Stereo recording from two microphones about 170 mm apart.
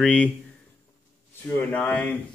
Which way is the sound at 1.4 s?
10° left (ahead or behind).